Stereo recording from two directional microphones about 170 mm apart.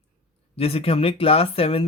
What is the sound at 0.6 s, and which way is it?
Speech, 35° left (ahead or behind).